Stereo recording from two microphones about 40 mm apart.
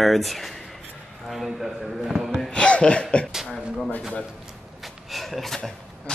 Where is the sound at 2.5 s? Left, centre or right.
Left.